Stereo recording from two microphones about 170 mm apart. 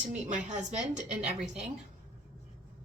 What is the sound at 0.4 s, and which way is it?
Speech, 45° right (ahead or behind).